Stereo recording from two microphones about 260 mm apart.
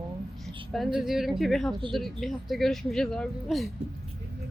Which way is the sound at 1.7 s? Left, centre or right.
Centre.